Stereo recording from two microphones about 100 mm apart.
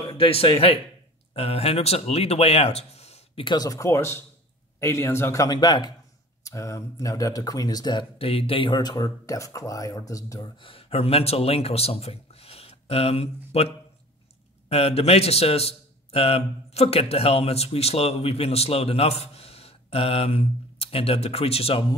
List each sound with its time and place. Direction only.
0.0 s speech: 60° left (ahead or behind); by 3.4 s 90° left
3.4 s speech: 40° left (ahead or behind)
6.4 s speech: 30° left (ahead or behind)
8.2 s speech: 75° left (ahead or behind); by 10.5 s 35° left (ahead or behind)
10.6 s a man's voice: 70° left (ahead or behind)